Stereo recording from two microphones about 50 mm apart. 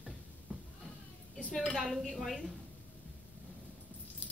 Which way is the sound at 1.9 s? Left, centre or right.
Centre.